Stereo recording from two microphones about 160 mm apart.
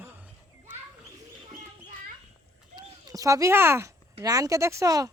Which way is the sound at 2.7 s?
20° right (ahead or behind).